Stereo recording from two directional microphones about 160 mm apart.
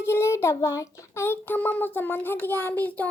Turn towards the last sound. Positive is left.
turn(degrees=10)  # may be behind; listen again after turning